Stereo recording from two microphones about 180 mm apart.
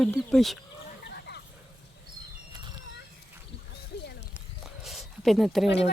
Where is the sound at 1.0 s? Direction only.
70° left (ahead or behind).